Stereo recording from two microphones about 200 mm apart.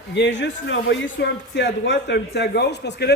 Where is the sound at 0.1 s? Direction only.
60° left (ahead or behind).